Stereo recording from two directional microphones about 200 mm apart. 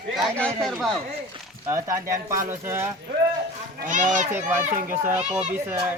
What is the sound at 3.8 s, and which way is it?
Speech, 40° right (ahead or behind).